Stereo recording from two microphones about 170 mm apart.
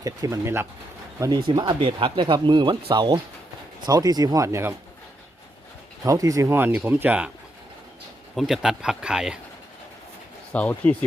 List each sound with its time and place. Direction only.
0.0 s speech: 20° right (ahead or behind)
1.2 s speech: 30° right (ahead or behind)
6.1 s speech: 20° right (ahead or behind)
8.4 s speech: centre (ahead or behind)
10.5 s speech: 10° left (ahead or behind)